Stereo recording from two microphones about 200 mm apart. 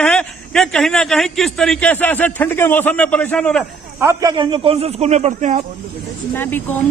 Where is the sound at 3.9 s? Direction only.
15° right (ahead or behind); by 5.6 s 35° right (ahead or behind).